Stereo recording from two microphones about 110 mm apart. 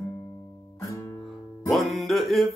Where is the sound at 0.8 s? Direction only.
25° left (ahead or behind).